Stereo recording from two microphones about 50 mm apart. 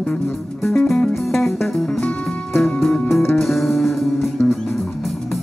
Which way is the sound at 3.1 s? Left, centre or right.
Left.